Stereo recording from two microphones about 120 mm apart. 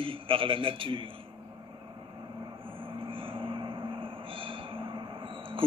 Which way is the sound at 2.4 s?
45° right (ahead or behind).